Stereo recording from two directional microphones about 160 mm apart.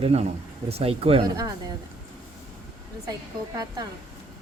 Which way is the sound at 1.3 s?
25° right (ahead or behind).